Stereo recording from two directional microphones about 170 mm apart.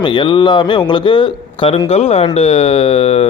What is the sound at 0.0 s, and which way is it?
A man's voice, 25° left (ahead or behind).